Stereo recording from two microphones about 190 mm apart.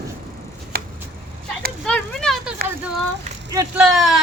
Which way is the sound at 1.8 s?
5° left (ahead or behind).